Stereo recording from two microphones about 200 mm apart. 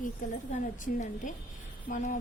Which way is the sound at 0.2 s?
40° left (ahead or behind).